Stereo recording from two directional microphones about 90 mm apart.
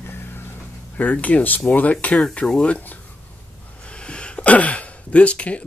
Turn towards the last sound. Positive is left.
turn(degrees=15)  # may be behind; listen again after turning